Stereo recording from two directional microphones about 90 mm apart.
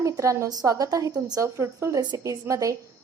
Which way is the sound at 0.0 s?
35° right (ahead or behind).